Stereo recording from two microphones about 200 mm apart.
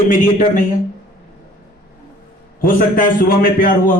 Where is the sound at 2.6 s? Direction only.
45° left (ahead or behind).